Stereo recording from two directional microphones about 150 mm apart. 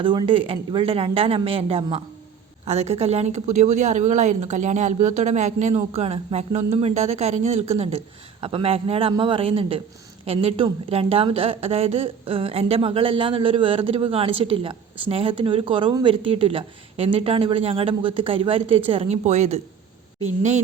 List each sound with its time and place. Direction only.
0.0 s a woman's voice: 35° right (ahead or behind); by 20.6 s 50° right (ahead or behind)